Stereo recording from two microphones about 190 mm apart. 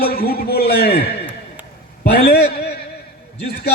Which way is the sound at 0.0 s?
55° left (ahead or behind).